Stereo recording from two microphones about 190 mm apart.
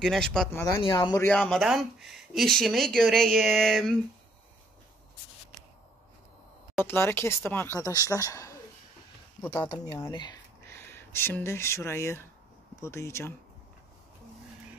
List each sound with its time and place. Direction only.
0.0 s speech: centre (ahead or behind)
0.8 s speech: 25° left (ahead or behind)
1.2 s speech: 5° left (ahead or behind)
6.8 s speech: 10° left (ahead or behind)
9.8 s speech: 20° left (ahead or behind)